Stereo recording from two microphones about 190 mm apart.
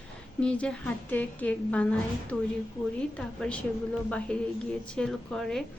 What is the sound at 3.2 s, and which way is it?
A woman's voice, 5° left (ahead or behind).